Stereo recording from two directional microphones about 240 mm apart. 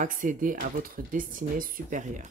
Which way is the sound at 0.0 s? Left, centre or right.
Right.